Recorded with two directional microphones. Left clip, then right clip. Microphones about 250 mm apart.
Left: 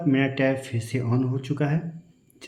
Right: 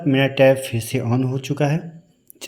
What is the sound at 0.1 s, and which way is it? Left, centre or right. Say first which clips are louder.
Speech: right 9 dB; right.